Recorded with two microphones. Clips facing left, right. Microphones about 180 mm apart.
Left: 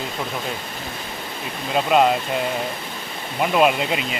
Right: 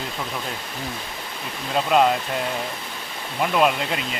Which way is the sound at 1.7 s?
5° left (ahead or behind).